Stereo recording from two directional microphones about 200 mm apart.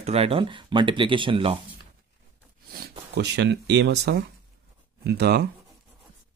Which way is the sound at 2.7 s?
55° right (ahead or behind).